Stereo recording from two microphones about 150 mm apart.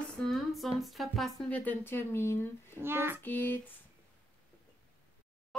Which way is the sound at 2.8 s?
15° right (ahead or behind).